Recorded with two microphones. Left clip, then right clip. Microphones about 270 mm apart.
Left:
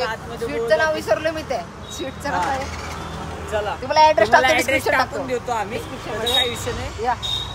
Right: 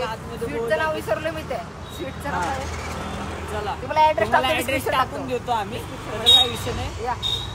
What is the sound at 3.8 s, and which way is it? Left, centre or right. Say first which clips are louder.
Speech: left 4 dB; left.